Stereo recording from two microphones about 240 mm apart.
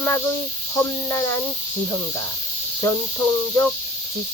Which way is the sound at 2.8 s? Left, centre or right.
Centre.